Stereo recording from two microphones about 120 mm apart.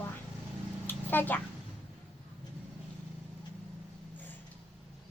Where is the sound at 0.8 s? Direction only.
15° left (ahead or behind).